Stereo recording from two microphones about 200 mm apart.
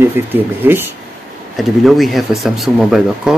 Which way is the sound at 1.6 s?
Centre (ahead or behind).